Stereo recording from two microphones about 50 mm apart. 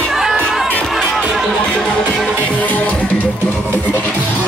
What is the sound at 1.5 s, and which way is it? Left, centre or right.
Music, centre.